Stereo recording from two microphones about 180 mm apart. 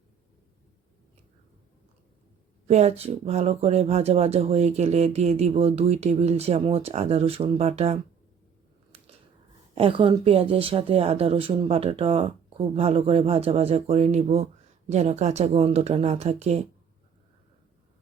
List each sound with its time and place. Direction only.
2.6 s speech: 35° right (ahead or behind)
8.9 s biting: 35° right (ahead or behind)
9.7 s speech: 30° right (ahead or behind)